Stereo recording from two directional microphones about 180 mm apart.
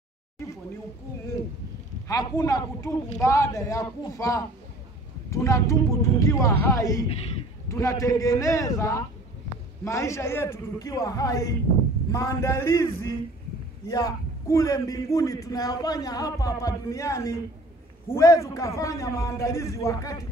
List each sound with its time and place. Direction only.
2.0 s a man's voice: 20° left (ahead or behind)